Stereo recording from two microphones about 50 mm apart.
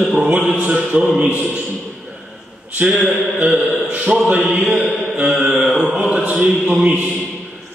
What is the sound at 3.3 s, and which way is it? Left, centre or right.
Mantra, right.